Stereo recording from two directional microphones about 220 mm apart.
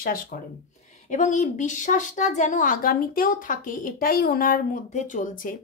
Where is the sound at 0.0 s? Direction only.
40° left (ahead or behind).